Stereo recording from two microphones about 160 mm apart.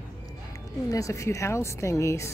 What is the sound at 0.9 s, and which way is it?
A woman's voice, 20° left (ahead or behind).